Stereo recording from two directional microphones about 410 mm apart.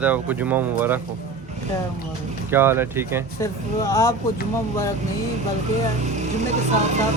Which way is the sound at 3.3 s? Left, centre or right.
Centre.